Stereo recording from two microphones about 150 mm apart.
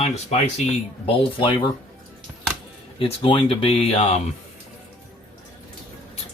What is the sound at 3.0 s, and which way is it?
Speech, 35° left (ahead or behind).